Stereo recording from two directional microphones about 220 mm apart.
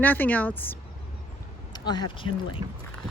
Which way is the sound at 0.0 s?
10° left (ahead or behind).